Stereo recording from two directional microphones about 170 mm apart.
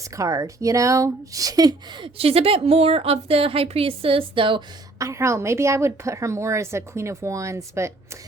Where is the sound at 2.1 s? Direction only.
35° right (ahead or behind).